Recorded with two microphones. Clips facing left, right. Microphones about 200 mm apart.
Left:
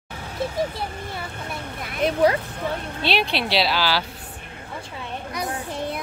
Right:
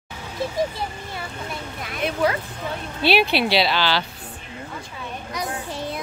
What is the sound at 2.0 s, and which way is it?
Speech, 40° left (ahead or behind).